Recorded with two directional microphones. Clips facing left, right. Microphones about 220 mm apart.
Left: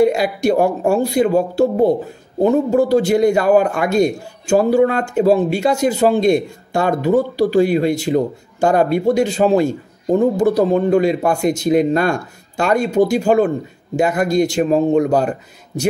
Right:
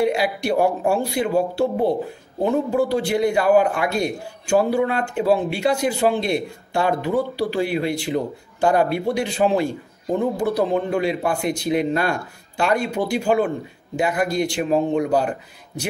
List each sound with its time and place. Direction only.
0.0 s a man's voice: 45° left (ahead or behind)